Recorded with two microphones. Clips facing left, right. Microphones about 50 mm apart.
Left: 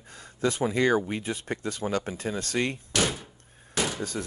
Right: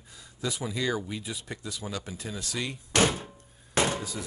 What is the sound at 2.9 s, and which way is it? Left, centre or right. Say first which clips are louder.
Door: right 8 dB; right.